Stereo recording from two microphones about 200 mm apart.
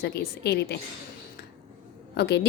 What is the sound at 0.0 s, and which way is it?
Speech, 55° left (ahead or behind).